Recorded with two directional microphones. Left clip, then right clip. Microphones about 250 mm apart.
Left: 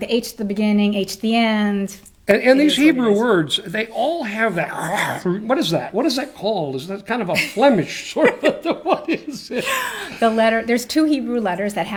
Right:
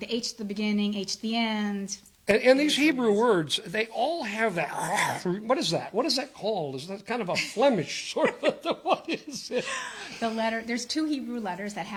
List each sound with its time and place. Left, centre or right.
0.1 s speech: centre
2.2 s speech: right
8.2 s speech: centre
8.6 s speech: right
9.6 s speech: centre